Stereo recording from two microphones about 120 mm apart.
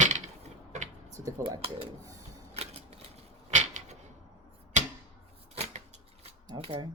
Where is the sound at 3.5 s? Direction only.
90° right.